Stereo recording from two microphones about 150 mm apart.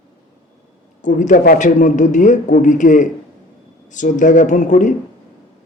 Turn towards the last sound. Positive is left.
turn(degrees=55)  # may be behind; listen again after turning